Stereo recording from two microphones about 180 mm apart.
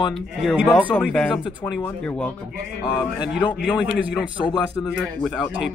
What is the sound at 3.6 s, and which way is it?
Speech, 5° right (ahead or behind).